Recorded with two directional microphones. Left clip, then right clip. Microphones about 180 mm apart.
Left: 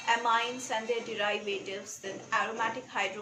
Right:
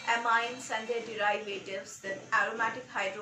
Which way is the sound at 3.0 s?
20° left (ahead or behind).